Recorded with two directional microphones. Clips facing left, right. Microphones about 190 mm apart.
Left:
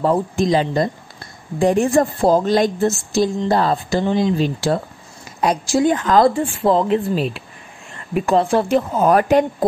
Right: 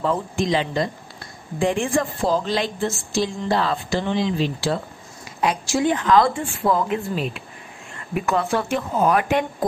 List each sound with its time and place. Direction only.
0.0 s a woman's voice: 40° left (ahead or behind)